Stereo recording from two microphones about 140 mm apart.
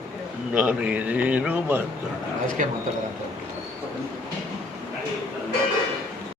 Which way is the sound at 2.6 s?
60° right (ahead or behind).